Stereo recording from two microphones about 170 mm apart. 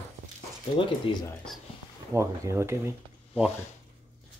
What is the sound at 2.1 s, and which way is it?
Speech, 15° right (ahead or behind).